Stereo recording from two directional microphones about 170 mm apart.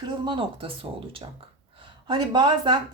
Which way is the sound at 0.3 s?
30° right (ahead or behind).